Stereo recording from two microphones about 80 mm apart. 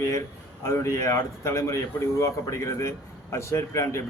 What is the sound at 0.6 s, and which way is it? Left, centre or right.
Speech, left.